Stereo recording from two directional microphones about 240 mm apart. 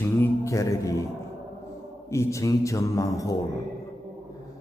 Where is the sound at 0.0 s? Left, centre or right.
Centre.